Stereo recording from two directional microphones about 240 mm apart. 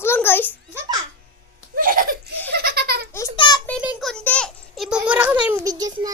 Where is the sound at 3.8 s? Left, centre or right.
Centre.